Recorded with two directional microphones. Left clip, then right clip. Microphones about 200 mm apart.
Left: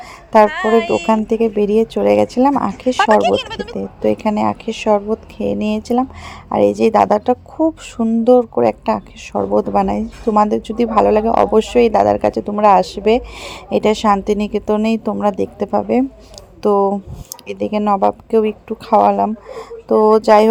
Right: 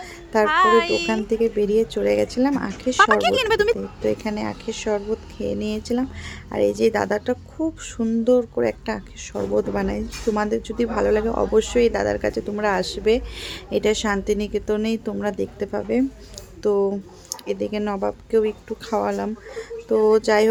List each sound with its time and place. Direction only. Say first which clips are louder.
0.5 s speech: left 2 dB; 15° right (ahead or behind)
1.0 s a woman's voice: left 6 dB; 30° left (ahead or behind)
3.2 s speech: left 3 dB; 15° right (ahead or behind)
3.8 s a woman's voice: left 6 dB; 30° left (ahead or behind)